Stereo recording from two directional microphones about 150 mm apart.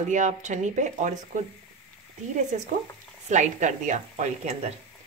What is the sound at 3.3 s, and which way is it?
Speech, 55° right (ahead or behind).